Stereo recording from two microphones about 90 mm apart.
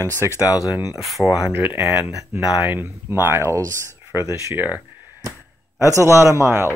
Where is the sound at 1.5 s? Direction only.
20° right (ahead or behind).